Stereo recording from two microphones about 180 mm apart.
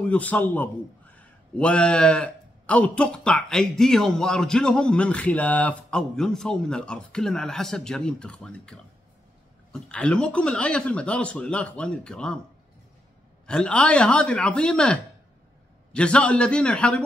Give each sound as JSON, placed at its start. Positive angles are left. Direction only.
{"t": 0.1, "sound": "a man's voice", "side_deg": 10}
{"t": 13.5, "sound": "a man's voice", "side_deg": 5}